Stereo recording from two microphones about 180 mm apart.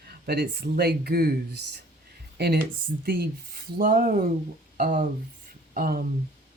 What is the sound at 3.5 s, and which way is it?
Speech, 55° right (ahead or behind).